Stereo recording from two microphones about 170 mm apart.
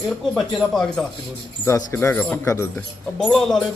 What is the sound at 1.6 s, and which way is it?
Speech, 15° left (ahead or behind).